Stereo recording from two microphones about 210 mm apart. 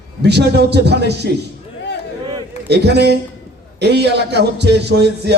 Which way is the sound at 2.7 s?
55° right (ahead or behind).